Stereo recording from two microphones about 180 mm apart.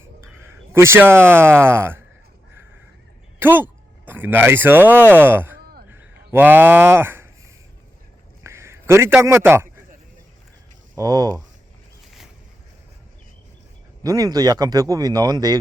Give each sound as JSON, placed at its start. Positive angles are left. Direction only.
{"t": 0.7, "sound": "speech", "side_deg": -15}
{"t": 3.4, "sound": "speech", "side_deg": -10}
{"t": 5.9, "sound": "a sound", "side_deg": -10}
{"t": 8.4, "sound": "a man's voice", "side_deg": -15}
{"t": 10.9, "sound": "speech", "side_deg": -20}
{"t": 14.0, "sound": "speech", "side_deg": -20}